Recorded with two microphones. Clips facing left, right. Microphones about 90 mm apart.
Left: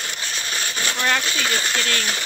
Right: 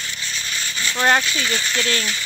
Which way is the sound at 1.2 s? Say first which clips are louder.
Even; 45° left (ahead or behind).